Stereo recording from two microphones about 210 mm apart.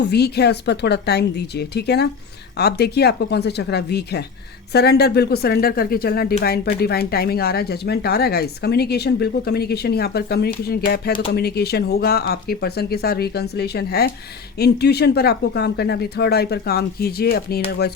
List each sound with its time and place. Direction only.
0.0 s speech: 50° left (ahead or behind)